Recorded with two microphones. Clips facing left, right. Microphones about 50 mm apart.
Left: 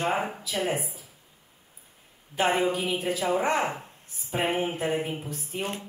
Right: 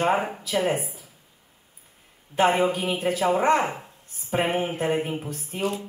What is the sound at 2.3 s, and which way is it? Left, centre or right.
Speech, right.